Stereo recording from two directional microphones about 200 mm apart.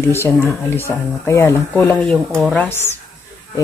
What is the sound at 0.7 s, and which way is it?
Speech, 15° left (ahead or behind).